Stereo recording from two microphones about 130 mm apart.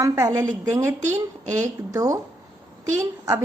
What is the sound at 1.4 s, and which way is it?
Speech, 65° right (ahead or behind).